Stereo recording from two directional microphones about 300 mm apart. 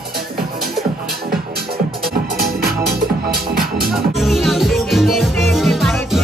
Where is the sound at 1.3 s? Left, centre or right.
Right.